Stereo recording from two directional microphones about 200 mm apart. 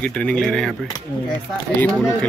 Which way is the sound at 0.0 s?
5° left (ahead or behind).